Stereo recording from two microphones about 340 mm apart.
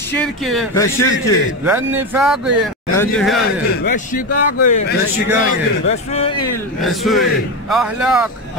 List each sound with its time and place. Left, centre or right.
0.1 s speech: centre
1.6 s speech: centre
3.8 s a man's voice: left
4.3 s speech: left
4.6 s a man's voice: left
6.8 s speech: centre